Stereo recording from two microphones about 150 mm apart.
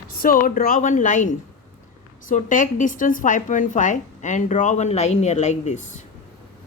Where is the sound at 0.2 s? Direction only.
70° left (ahead or behind); by 1.3 s 55° left (ahead or behind).